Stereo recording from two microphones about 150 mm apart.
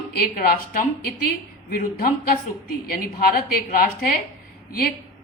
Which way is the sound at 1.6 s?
70° left (ahead or behind).